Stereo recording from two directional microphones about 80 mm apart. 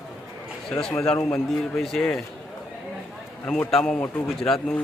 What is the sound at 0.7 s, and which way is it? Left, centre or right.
A man's voice, centre.